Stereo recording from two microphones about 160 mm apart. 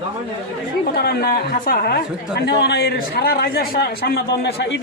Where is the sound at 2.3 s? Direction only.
90° left.